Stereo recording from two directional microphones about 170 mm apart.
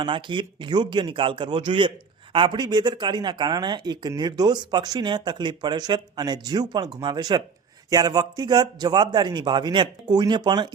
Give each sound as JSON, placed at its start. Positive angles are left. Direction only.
{"t": 0.0, "sound": "speech", "side_deg": -30}